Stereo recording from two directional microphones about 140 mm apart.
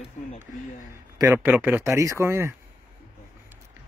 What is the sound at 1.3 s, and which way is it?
Speech, 15° right (ahead or behind).